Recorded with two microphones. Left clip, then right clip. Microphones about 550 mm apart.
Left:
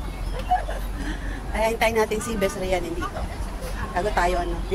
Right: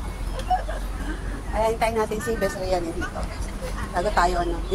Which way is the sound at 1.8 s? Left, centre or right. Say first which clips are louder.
Left 2 dB; left.